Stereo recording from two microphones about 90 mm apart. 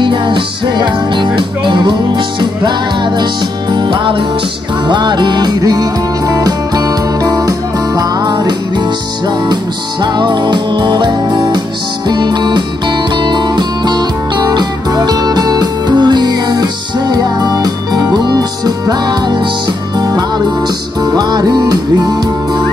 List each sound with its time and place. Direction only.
0.0 s music: 60° right (ahead or behind)
3.7 s music: 60° right (ahead or behind)
10.1 s music: 60° right (ahead or behind)